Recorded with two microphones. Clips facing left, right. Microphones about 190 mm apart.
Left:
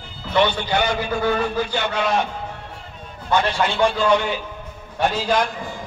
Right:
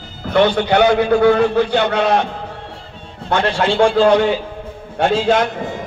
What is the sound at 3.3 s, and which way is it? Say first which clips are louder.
Speech: right 2 dB; 65° right (ahead or behind).